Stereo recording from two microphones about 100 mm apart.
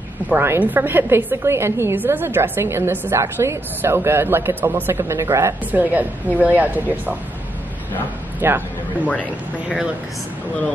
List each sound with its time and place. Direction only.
0.3 s a woman's voice: 20° right (ahead or behind)
5.7 s a woman's voice: 15° right (ahead or behind)
8.4 s a man's voice: 20° right (ahead or behind)
9.0 s speech: 15° left (ahead or behind)
9.7 s a woman's voice: 10° right (ahead or behind)